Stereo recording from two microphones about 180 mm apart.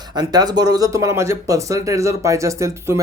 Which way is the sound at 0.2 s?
20° right (ahead or behind).